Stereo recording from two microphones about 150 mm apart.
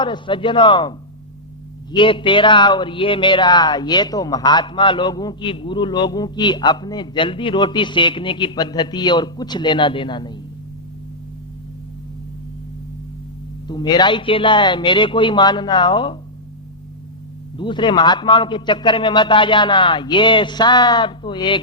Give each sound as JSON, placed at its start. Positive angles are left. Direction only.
{"t": 0.0, "sound": "speech", "side_deg": 30}
{"t": 13.7, "sound": "speech", "side_deg": 30}
{"t": 17.6, "sound": "speech", "side_deg": 30}